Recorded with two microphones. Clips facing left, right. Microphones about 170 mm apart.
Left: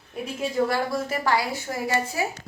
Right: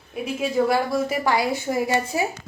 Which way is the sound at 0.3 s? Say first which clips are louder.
Right 3 dB; 10° right (ahead or behind).